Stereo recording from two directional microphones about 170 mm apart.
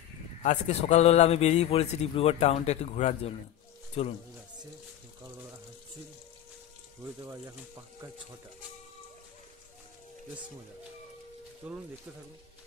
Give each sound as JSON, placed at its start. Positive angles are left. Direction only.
{"t": 0.4, "sound": "a man's voice", "side_deg": 40}
{"t": 7.2, "sound": "speech", "side_deg": -20}
{"t": 11.6, "sound": "speech", "side_deg": -10}